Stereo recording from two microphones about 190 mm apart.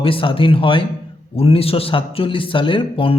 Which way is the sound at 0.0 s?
30° left (ahead or behind).